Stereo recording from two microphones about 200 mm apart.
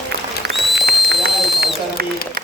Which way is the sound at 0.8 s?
55° right (ahead or behind).